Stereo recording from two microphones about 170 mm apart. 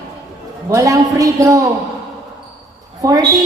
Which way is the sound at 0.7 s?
20° right (ahead or behind).